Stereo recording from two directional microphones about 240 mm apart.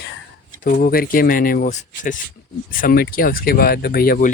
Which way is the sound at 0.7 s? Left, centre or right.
Left.